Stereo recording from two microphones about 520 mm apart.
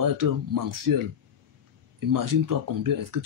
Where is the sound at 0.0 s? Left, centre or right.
Right.